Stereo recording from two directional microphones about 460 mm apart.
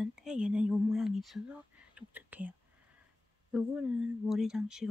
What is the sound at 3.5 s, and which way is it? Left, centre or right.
Speech, centre.